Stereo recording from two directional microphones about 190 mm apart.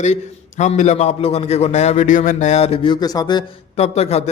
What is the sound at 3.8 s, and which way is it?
Speech, 35° left (ahead or behind).